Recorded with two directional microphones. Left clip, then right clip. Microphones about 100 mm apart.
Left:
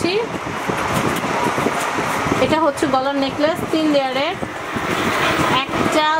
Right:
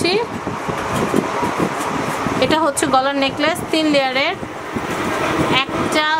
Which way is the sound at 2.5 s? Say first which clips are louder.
Right 3 dB; 65° right (ahead or behind).